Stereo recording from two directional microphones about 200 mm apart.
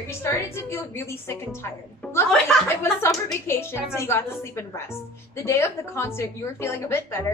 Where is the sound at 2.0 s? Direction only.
10° left (ahead or behind).